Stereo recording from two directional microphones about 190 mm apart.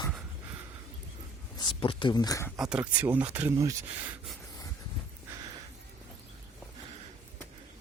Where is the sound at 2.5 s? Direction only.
5° right (ahead or behind).